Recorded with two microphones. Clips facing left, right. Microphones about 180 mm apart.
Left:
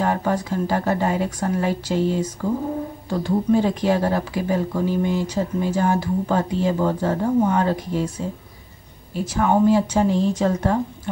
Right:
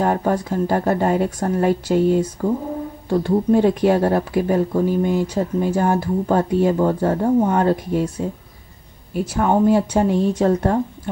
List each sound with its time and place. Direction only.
0.0 s speech: 45° right (ahead or behind)
9.1 s speech: 60° right (ahead or behind)